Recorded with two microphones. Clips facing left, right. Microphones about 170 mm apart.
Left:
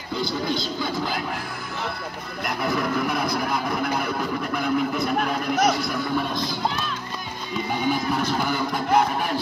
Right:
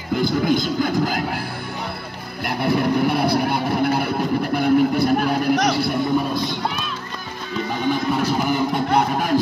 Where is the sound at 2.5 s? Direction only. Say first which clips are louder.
Right 5 dB; 30° right (ahead or behind).